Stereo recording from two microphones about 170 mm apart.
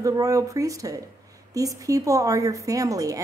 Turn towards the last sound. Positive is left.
turn(degrees=-20)  # may be behind; listen again after turning